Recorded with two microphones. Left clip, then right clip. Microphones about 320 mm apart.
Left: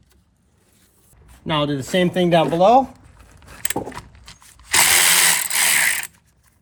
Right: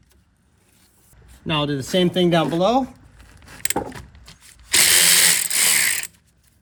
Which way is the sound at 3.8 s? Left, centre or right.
Left.